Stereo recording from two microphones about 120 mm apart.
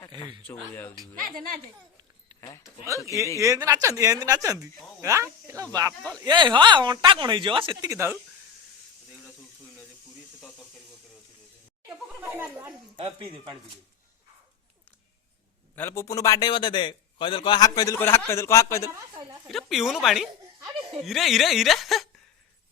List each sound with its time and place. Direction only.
0.4 s speech: 15° left (ahead or behind)
0.9 s speech: 35° right (ahead or behind)
2.4 s speech: 30° left (ahead or behind)
3.3 s speech: 25° right (ahead or behind)
6.1 s speech: 40° right (ahead or behind)
7.9 s speech: 20° right (ahead or behind)
11.9 s chatter: 20° right (ahead or behind)
13.0 s speech: 50° right (ahead or behind)
15.7 s a man's voice: 20° left (ahead or behind); by 17.9 s 35° left (ahead or behind)
17.9 s a man's voice: 20° left (ahead or behind)
19.5 s speech: centre (ahead or behind)